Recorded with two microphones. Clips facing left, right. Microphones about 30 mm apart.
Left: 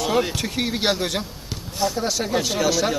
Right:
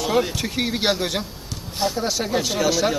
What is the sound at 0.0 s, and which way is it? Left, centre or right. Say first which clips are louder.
A man's voice: even; centre.